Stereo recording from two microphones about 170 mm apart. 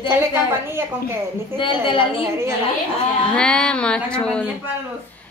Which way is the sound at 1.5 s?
30° left (ahead or behind).